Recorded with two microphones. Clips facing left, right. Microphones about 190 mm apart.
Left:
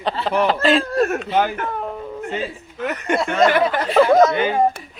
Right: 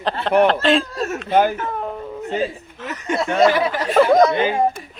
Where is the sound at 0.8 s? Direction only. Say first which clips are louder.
Left 6 dB; 55° left (ahead or behind).